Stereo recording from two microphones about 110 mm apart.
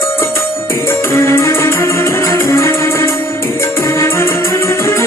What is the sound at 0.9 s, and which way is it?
Music, 25° left (ahead or behind).